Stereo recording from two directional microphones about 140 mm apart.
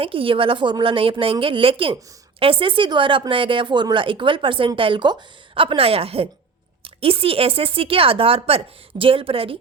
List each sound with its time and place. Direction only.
0.0 s speech: 40° right (ahead or behind)